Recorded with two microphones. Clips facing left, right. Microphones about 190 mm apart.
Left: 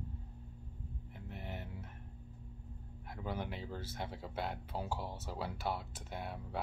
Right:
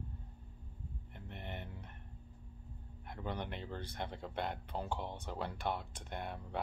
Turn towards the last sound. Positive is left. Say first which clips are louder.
# even
turn(degrees=5)  # may be behind; listen again after turning